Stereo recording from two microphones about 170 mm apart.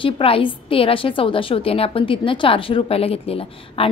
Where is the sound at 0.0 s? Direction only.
30° left (ahead or behind).